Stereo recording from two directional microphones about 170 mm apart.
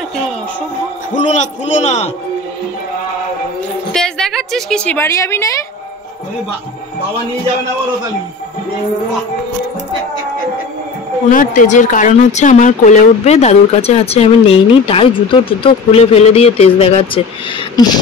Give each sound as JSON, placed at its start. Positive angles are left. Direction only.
{"t": 1.3, "sound": "a man's voice", "side_deg": 45}
{"t": 3.9, "sound": "a woman's voice", "side_deg": 5}
{"t": 11.2, "sound": "speech", "side_deg": 45}